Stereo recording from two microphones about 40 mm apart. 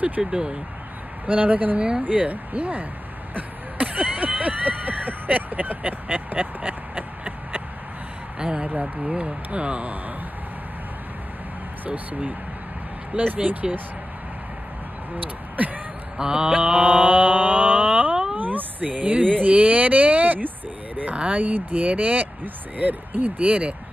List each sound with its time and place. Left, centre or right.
0.2 s speech: centre
1.2 s speech: right
3.3 s a sound: right
8.4 s speech: right
11.8 s speech: right
15.5 s a sound: right
16.2 s mantra: centre
16.4 s mantra: right
18.3 s cat: right
19.4 s a sound: right
21.4 s speech: right